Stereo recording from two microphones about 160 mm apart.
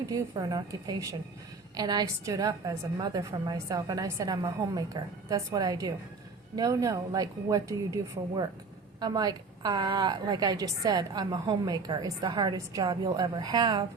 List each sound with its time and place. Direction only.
0.0 s a woman's voice: 25° right (ahead or behind)
9.0 s a woman's voice: 25° right (ahead or behind)